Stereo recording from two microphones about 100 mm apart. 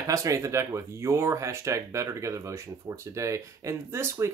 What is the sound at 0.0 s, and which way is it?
Speech, 35° right (ahead or behind).